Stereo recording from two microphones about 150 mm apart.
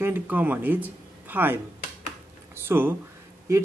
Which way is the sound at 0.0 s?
15° right (ahead or behind).